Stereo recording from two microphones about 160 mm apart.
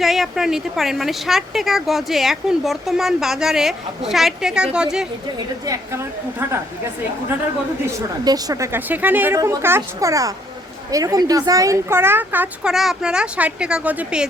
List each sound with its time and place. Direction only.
0.0 s a woman's voice: centre (ahead or behind)
5.6 s a woman's voice: 20° right (ahead or behind)
7.9 s a woman's voice: 20° right (ahead or behind)